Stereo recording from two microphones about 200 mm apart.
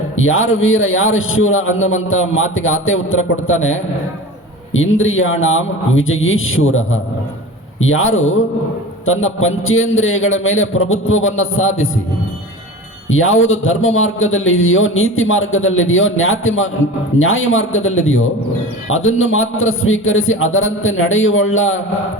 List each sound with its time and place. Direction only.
0.2 s a man's voice: 80° left
13.1 s a man's voice: 85° left